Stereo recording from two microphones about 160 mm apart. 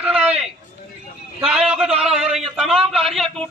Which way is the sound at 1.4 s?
5° right (ahead or behind).